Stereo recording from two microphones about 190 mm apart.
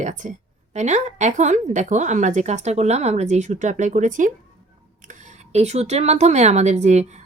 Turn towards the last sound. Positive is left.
turn(degrees=-35)  # may be behind; listen again after turning